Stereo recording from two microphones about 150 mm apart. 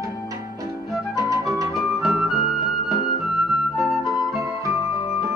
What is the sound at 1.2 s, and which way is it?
Music, 20° right (ahead or behind).